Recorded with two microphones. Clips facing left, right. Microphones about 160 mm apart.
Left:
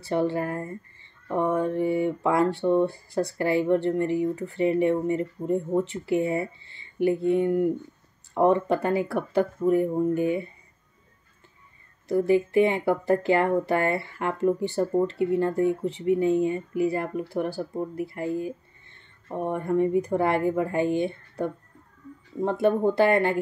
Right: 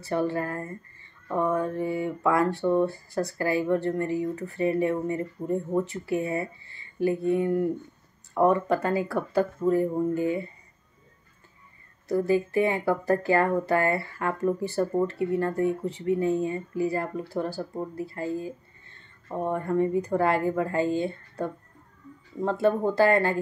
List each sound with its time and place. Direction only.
0.0 s speech: 20° left (ahead or behind)
12.1 s speech: 20° left (ahead or behind)